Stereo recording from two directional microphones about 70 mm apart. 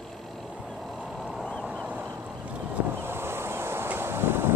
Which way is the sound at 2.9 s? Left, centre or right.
Right.